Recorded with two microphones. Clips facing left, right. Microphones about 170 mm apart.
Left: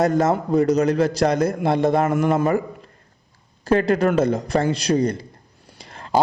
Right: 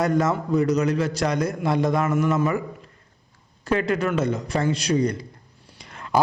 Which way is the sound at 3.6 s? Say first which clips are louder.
Left 5 dB; 35° left (ahead or behind).